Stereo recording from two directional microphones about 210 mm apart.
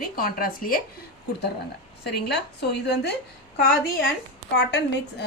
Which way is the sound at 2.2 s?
50° left (ahead or behind).